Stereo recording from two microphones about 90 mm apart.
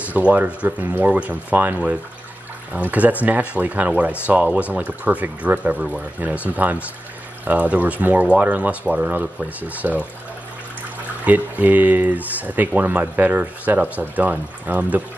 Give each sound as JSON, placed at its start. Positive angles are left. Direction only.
{"t": 0.1, "sound": "speech", "side_deg": -15}
{"t": 11.2, "sound": "speech", "side_deg": -20}